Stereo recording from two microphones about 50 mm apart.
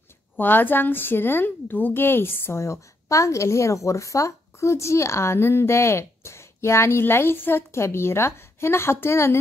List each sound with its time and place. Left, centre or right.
0.4 s a woman's voice: left
2.6 s a woman's voice: left
7.7 s a woman's voice: left